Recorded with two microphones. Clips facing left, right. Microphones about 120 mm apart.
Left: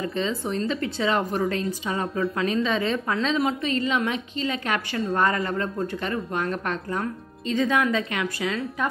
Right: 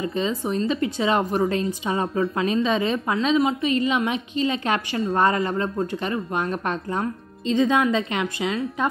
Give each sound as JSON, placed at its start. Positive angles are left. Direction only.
{"t": 0.1, "sound": "a woman's voice", "side_deg": -15}